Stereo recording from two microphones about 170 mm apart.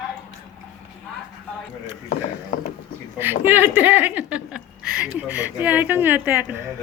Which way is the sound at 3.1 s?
10° right (ahead or behind).